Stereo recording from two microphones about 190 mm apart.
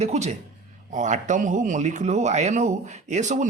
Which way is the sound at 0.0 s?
35° right (ahead or behind).